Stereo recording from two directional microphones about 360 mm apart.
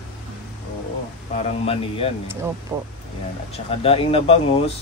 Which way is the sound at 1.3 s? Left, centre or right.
Centre.